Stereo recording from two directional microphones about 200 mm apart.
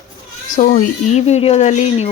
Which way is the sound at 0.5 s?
40° left (ahead or behind).